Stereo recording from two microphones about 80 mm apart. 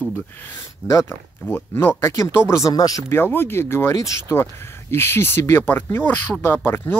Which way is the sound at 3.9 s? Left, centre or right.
Left.